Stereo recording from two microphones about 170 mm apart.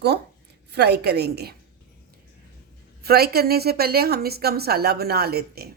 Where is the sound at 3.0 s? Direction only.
65° right (ahead or behind).